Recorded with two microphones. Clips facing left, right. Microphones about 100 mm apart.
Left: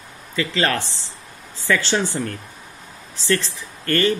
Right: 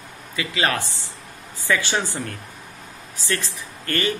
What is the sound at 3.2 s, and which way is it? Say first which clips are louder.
Speech: left 6 dB; 15° right (ahead or behind).